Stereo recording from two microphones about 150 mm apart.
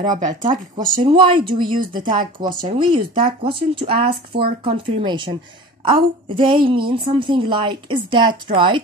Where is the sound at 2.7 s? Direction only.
35° right (ahead or behind).